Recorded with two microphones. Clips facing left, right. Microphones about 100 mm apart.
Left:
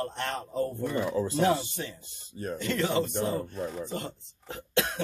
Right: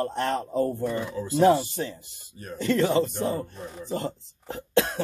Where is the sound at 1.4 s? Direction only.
35° right (ahead or behind).